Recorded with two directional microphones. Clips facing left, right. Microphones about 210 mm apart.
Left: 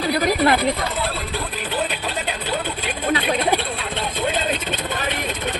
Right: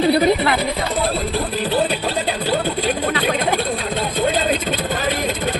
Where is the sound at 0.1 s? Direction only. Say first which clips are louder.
Right 3 dB; 25° right (ahead or behind).